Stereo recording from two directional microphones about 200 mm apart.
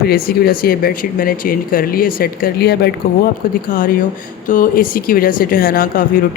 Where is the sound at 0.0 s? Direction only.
50° left (ahead or behind).